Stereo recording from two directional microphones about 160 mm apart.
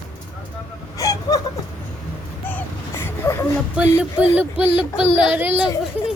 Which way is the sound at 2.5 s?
15° left (ahead or behind).